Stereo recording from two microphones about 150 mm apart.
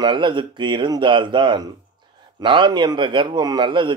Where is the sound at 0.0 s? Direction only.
30° right (ahead or behind).